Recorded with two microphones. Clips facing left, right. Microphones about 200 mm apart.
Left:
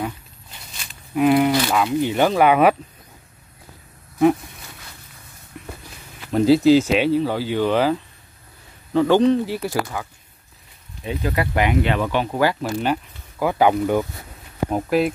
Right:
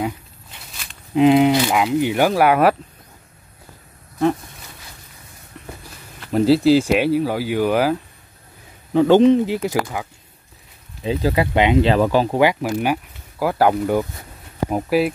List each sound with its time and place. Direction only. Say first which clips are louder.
1.1 s speech: right 3 dB; 20° right (ahead or behind); by 2.7 s 5° right (ahead or behind)
5.5 s a sound: left 1 dB; 5° left (ahead or behind)
6.2 s speech: even; centre (ahead or behind)
8.9 s speech: right 3 dB; 20° right (ahead or behind)
11.1 s speech: right 4 dB; 30° right (ahead or behind)
12.4 s speech: right 3 dB; 15° right (ahead or behind)